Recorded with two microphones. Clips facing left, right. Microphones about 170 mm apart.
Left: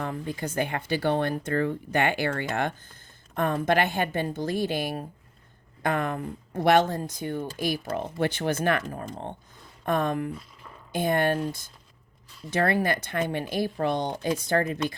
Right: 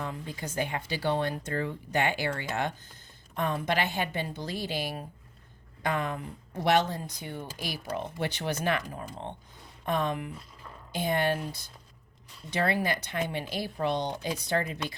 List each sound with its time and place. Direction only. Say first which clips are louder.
0.0 s speech: left 5 dB; 55° left (ahead or behind)